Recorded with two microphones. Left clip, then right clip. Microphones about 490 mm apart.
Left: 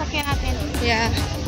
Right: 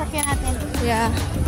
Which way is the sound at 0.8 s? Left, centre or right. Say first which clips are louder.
Even; right.